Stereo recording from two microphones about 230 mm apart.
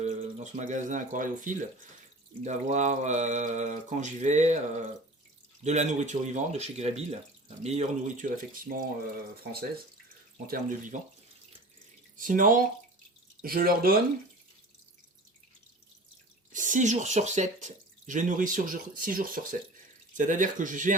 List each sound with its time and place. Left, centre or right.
0.0 s speech: right
5.6 s speech: right
12.1 s speech: right
16.5 s speech: right